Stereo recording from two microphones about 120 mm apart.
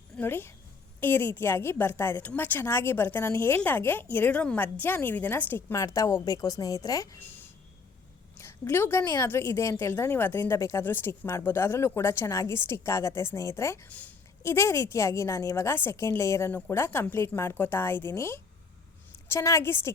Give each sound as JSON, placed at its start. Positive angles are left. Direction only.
{"t": 0.2, "sound": "a woman's voice", "side_deg": 20}
{"t": 8.4, "sound": "a woman's voice", "side_deg": 20}